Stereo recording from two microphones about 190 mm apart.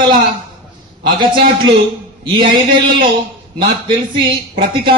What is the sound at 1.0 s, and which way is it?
Speech, 25° right (ahead or behind).